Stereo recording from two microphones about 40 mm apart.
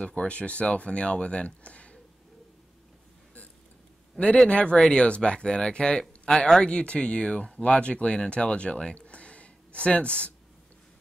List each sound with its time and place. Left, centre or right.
0.0 s speech: left
4.5 s speech: left